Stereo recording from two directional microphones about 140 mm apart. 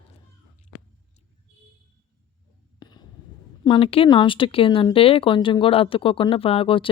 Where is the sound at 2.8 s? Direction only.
30° left (ahead or behind).